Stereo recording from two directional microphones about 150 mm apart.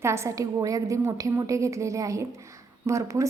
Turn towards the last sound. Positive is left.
turn(degrees=-20)  # may be behind; listen again after turning